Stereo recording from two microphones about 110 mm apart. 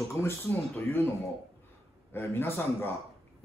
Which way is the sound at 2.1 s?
20° left (ahead or behind).